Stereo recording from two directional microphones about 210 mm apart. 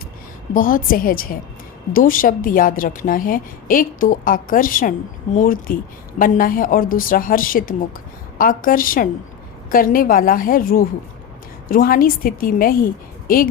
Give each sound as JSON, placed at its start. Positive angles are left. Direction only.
{"t": 0.5, "sound": "a woman's voice", "side_deg": 40}